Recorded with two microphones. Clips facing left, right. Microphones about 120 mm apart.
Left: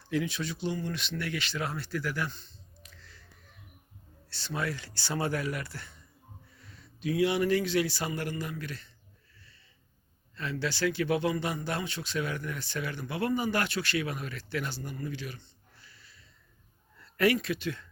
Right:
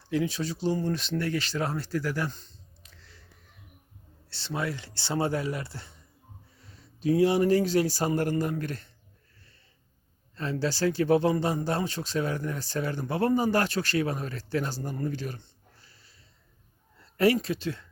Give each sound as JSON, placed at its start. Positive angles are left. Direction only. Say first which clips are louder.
{"t": 0.1, "sound": "speech", "louder": "right 3 dB", "side_deg": -35}
{"t": 3.0, "sound": "a sound", "louder": "even", "side_deg": -25}
{"t": 4.3, "sound": "speech", "louder": "right 2 dB", "side_deg": -25}
{"t": 10.3, "sound": "speech", "louder": "right 4 dB", "side_deg": -35}